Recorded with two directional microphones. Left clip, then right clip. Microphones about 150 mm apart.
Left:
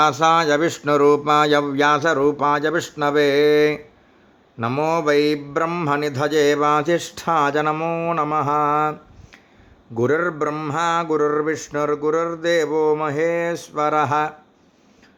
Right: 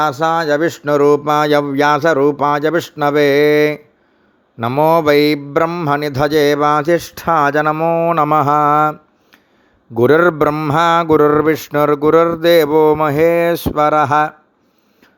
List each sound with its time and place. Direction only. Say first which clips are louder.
0.0 s speech: right 1 dB; 25° right (ahead or behind); by 5.6 s 55° right (ahead or behind)
5.6 s speech: right 5 dB; 30° right (ahead or behind)
5.9 s speech: right 5 dB; 45° right (ahead or behind)
8.1 s mantra: right 5 dB; 60° right (ahead or behind)
10.1 s mantra: right 10 dB; 75° right (ahead or behind); by 14.3 s 45° right (ahead or behind)